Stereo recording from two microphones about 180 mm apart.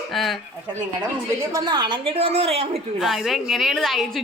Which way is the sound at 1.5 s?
25° right (ahead or behind).